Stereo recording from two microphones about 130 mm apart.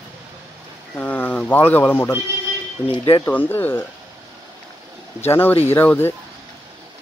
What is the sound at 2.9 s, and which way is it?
Speech, 35° left (ahead or behind).